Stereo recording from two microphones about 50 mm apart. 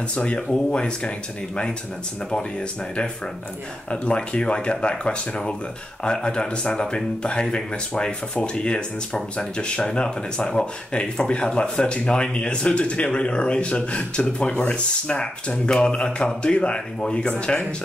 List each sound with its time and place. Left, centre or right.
0.1 s speech: left
3.9 s speech: left